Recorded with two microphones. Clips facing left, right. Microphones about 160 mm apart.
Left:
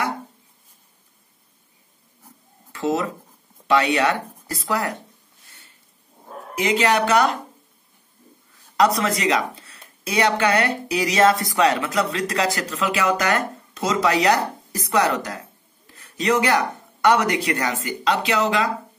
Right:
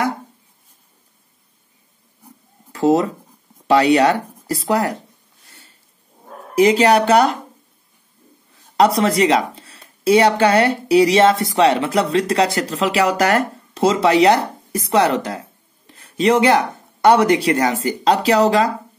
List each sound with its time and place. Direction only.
2.7 s speech: 35° right (ahead or behind)
6.5 s speech: 35° right (ahead or behind)
8.7 s a woman's voice: 30° right (ahead or behind)